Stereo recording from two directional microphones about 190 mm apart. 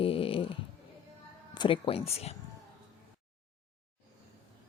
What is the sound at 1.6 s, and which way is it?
Speech, 25° left (ahead or behind).